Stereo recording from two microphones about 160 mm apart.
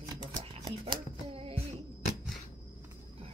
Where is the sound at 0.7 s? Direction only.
35° right (ahead or behind).